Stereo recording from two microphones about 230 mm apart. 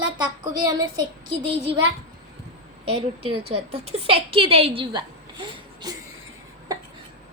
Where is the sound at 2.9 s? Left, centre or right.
Right.